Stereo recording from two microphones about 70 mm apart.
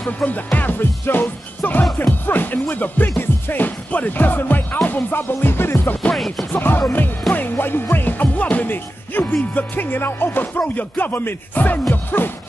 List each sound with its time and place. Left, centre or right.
0.3 s speech: left
4.8 s music: left
6.1 s speech: centre
6.5 s speech: left